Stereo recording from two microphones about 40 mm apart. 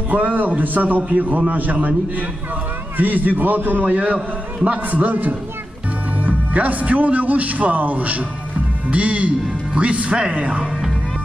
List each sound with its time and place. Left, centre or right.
0.1 s a man's voice: right